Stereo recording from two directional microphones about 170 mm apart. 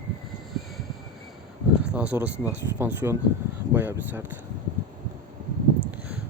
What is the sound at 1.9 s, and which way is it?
Speech, 10° right (ahead or behind).